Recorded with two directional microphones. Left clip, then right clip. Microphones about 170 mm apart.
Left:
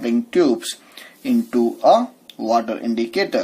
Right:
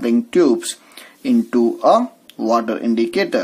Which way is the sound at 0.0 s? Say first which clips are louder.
Right 2 dB; 30° right (ahead or behind).